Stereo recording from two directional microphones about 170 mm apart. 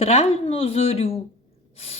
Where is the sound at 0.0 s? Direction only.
40° left (ahead or behind).